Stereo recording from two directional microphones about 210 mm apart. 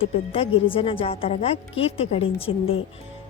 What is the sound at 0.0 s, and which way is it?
A woman's voice, 25° left (ahead or behind).